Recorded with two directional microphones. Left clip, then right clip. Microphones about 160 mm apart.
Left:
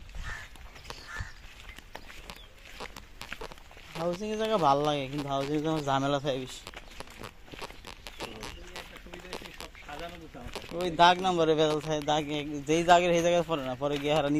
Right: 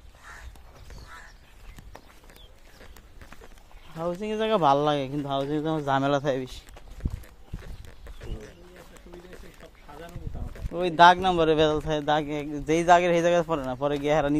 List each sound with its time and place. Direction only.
4.0 s speech: 30° right (ahead or behind)
5.3 s a man's voice: 20° right (ahead or behind)
6.0 s speech: 35° right (ahead or behind)
10.8 s a man's voice: 40° right (ahead or behind); by 14.3 s 25° right (ahead or behind)